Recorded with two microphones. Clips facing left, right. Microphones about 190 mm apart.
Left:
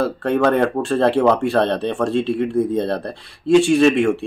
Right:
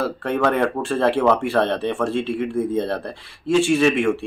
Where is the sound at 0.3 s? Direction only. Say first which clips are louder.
Left 3 dB; 20° left (ahead or behind).